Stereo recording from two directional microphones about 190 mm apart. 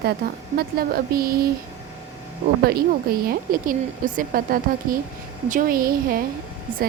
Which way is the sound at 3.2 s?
50° right (ahead or behind).